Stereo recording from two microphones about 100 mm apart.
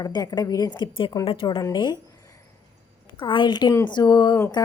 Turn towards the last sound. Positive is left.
turn(degrees=40)  # may be behind; listen again after turning